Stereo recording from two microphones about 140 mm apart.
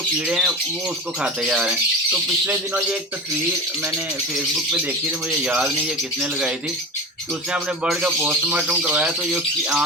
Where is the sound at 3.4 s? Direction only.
20° right (ahead or behind).